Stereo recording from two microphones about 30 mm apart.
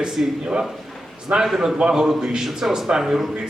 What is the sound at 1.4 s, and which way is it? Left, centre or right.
Speech, centre.